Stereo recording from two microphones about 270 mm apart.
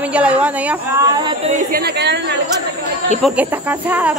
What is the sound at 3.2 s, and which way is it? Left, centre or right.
Speech, centre.